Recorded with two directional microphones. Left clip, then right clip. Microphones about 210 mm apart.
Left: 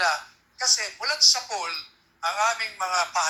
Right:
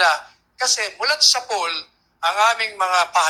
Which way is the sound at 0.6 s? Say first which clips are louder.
Right 4 dB; 35° right (ahead or behind).